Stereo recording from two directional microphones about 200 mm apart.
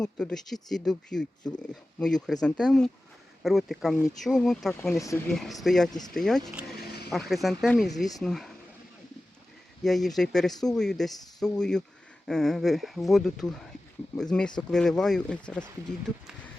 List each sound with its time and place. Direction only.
0.0 s speech: 5° left (ahead or behind)
6.7 s a sound: 55° left (ahead or behind)
7.1 s speech: centre (ahead or behind)
9.8 s speech: centre (ahead or behind)